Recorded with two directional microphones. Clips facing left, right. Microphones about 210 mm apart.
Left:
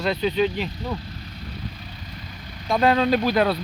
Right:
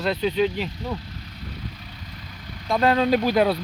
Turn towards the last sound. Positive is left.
turn(degrees=-10)  # may be behind; listen again after turning